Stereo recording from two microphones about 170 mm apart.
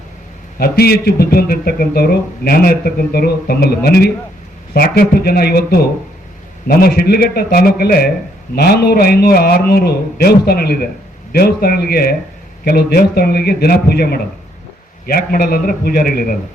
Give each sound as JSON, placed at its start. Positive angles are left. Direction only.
{"t": 0.6, "sound": "a man's voice", "side_deg": 65}